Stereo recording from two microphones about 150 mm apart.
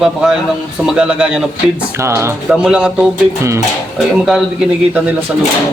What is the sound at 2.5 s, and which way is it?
Speech, 5° right (ahead or behind).